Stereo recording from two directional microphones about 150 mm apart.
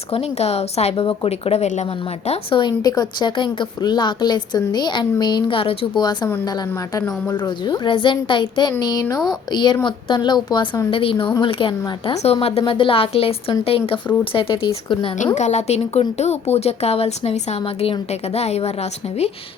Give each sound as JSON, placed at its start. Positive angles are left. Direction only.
{"t": 0.1, "sound": "a woman's voice", "side_deg": 45}
{"t": 15.4, "sound": "speech", "side_deg": 50}